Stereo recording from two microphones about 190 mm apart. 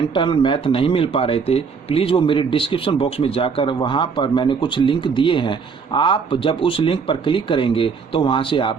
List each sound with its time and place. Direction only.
0.1 s a man's voice: 25° left (ahead or behind)